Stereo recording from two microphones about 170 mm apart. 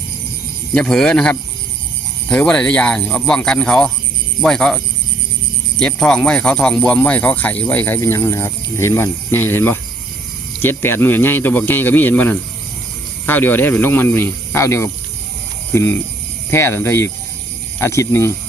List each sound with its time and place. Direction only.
0.7 s speech: 5° left (ahead or behind)
5.8 s speech: 5° left (ahead or behind)